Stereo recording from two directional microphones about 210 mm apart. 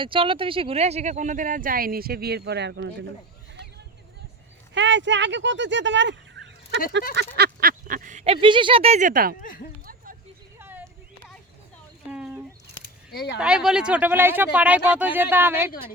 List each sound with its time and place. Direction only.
0.0 s speech: 25° right (ahead or behind); by 3.1 s 60° right (ahead or behind)
4.7 s speech: 60° right (ahead or behind)
7.3 s speech: 45° right (ahead or behind)
9.4 s speech: 40° left (ahead or behind)
9.8 s a sound: 45° right (ahead or behind)
10.6 s a sound: 10° right (ahead or behind)
12.1 s a sound: 5° right (ahead or behind)
13.1 s speech: 50° left (ahead or behind)
13.4 s speech: 5° right (ahead or behind)